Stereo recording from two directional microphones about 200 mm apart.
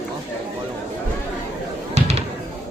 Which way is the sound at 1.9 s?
30° right (ahead or behind).